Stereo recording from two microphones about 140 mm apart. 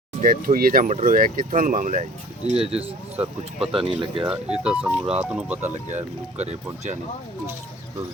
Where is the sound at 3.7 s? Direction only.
40° right (ahead or behind).